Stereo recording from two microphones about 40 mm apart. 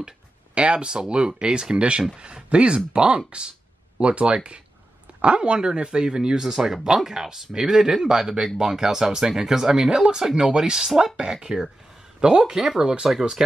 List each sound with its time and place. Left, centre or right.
0.6 s speech: right
6.5 s speech: centre